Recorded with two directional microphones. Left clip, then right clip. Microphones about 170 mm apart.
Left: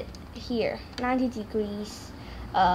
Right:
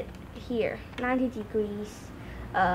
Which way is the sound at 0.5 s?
Centre (ahead or behind).